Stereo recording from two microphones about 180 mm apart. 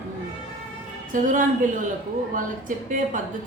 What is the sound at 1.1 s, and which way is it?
A woman's voice, 45° right (ahead or behind).